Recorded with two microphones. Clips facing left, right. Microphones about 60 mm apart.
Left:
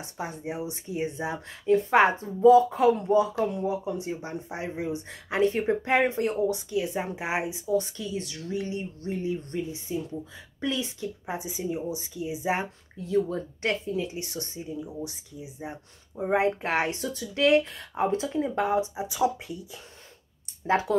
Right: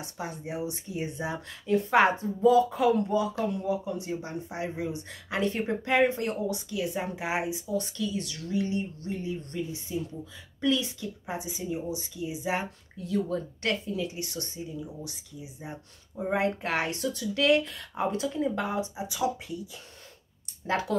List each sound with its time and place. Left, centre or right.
0.2 s speech: centre; by 10.0 s left
10.6 s speech: centre
15.6 s speech: centre